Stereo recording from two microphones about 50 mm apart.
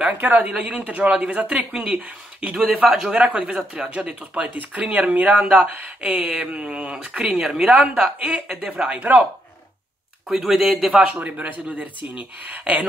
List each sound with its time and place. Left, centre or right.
0.1 s speech: right
0.5 s speech: centre
1.7 s speech: centre
3.2 s speech: right
10.3 s speech: centre
10.9 s speech: right
11.2 s speech: right